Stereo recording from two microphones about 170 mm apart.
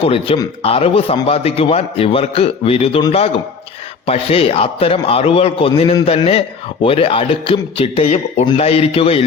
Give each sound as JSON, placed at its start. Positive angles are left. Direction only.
{"t": 0.0, "sound": "a man's voice", "side_deg": 35}